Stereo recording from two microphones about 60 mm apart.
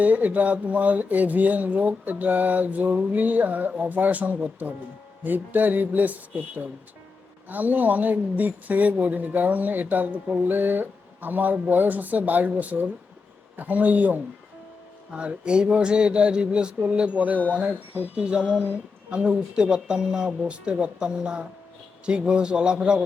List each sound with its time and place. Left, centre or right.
0.0 s a woman's voice: right